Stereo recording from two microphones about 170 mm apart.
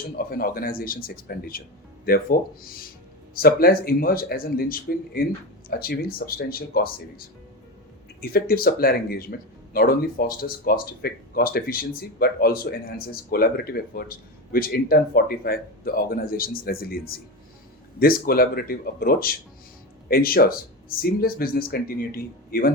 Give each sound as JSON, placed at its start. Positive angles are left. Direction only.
{"t": 0.2, "sound": "speech", "side_deg": 60}
{"t": 3.3, "sound": "speech", "side_deg": 60}